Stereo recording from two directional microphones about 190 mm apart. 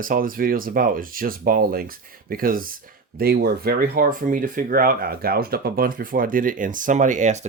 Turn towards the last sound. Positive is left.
turn(degrees=-40)  # may be behind; listen again after turning